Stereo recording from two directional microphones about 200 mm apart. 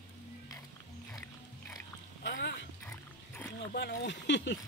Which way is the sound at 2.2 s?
55° left (ahead or behind).